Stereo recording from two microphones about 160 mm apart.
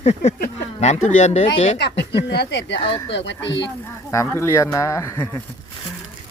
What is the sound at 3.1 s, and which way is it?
Speech, 90° left.